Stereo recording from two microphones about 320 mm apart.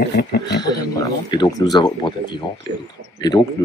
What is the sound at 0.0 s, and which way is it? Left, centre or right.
Speech, left.